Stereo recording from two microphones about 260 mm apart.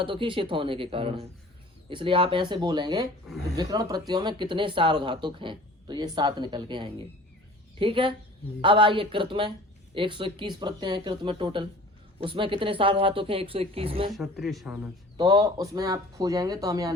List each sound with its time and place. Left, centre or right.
0.0 s speech: centre
14.1 s speech: centre
15.2 s speech: centre